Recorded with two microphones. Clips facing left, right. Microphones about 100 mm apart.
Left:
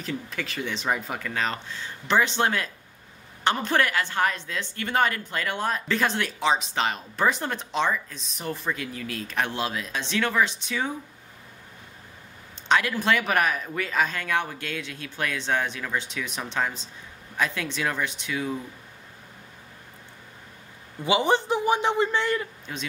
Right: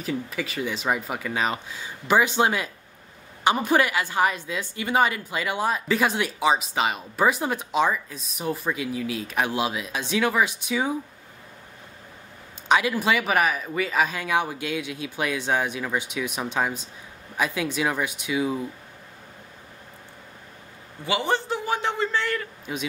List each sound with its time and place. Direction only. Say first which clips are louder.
0.0 s speech: right 3 dB; 5° right (ahead or behind)
12.6 s speech: right 2 dB; 10° right (ahead or behind)
21.0 s a man's voice: left 3 dB; 20° left (ahead or behind)